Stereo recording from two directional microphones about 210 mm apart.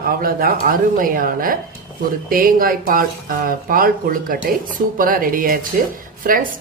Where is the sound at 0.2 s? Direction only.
45° right (ahead or behind).